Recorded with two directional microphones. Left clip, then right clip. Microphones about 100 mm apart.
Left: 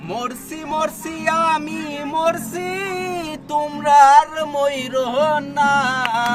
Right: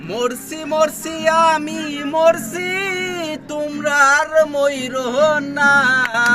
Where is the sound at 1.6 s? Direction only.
20° left (ahead or behind).